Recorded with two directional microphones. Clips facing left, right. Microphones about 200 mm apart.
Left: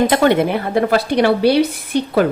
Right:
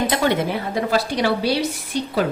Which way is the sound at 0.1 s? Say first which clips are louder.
Left 6 dB; 55° left (ahead or behind).